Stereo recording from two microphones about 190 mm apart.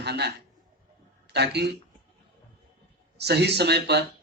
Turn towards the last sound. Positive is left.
turn(degrees=-60)  # may be behind; listen again after turning